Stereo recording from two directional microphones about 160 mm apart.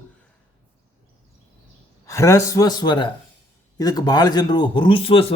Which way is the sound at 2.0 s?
20° left (ahead or behind).